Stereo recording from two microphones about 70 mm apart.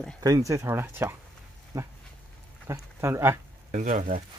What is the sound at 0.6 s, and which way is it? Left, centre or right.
Speech, right.